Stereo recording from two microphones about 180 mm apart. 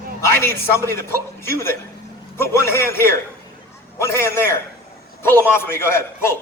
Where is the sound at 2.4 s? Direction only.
15° left (ahead or behind).